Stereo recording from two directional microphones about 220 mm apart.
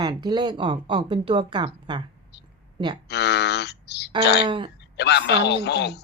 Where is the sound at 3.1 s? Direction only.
50° left (ahead or behind).